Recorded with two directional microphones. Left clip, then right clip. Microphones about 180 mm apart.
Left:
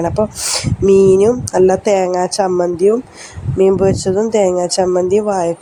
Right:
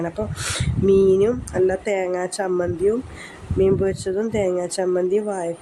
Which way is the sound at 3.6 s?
15° left (ahead or behind).